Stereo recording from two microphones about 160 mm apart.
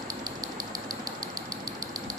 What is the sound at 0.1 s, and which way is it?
Vehicle, 25° right (ahead or behind).